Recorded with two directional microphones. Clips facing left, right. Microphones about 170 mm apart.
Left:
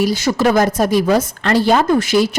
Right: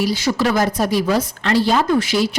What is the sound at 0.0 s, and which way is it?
A woman's voice, 45° left (ahead or behind).